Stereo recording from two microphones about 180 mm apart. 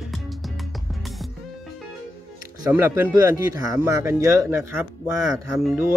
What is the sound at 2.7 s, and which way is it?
Speech, 10° right (ahead or behind).